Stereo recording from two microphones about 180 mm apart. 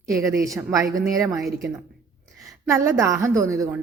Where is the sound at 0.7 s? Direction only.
20° right (ahead or behind).